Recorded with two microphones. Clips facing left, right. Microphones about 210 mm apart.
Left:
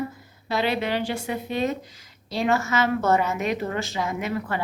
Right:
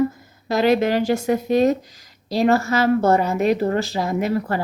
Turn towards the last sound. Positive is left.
turn(degrees=-40)  # may be behind; listen again after turning